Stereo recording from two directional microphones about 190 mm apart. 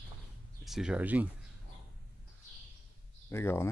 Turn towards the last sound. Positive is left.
turn(degrees=15)  # may be behind; listen again after turning